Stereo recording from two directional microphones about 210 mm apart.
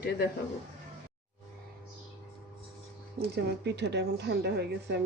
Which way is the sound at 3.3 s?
55° right (ahead or behind).